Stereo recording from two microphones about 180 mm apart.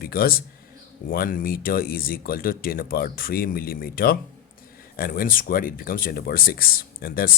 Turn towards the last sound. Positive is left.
turn(degrees=55)  # may be behind; listen again after turning